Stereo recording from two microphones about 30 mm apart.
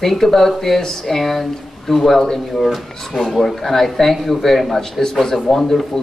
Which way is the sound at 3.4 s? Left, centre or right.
Centre.